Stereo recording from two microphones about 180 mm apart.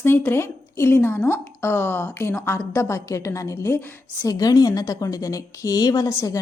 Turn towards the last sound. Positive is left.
turn(degrees=20)  # may be behind; listen again after turning